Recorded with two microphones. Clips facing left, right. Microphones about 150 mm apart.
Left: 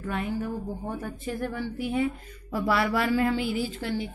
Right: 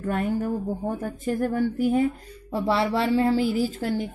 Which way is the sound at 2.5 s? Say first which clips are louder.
Right 2 dB; 25° right (ahead or behind).